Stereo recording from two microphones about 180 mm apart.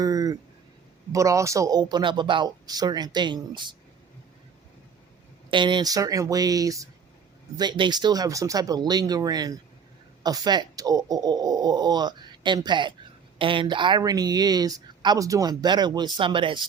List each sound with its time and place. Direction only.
0.0 s speech: 20° right (ahead or behind)
5.5 s speech: 25° right (ahead or behind)